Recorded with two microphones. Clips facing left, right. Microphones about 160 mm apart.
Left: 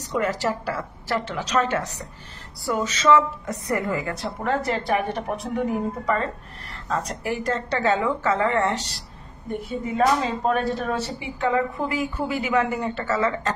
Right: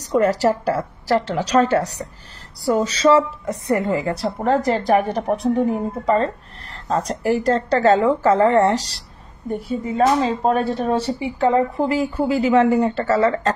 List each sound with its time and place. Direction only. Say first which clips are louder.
0.0 s a woman's voice: right 7 dB; 40° right (ahead or behind)